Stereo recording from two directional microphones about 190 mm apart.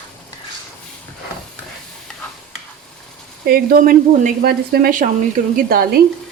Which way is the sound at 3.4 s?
55° right (ahead or behind).